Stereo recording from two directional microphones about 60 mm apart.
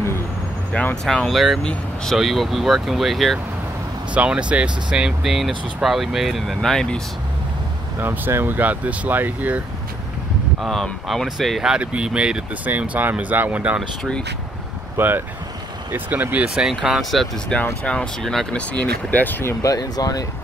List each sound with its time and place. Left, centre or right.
1.0 s speech: centre
1.6 s speech: centre
2.1 s speech: centre
4.1 s speech: centre
8.0 s speech: right
10.6 s speech: centre
11.6 s speech: centre
12.6 s speech: right
15.0 s speech: right
16.4 s speech: centre
17.0 s speech: centre
17.5 s speech: centre
18.7 s speech: left
19.6 s speech: left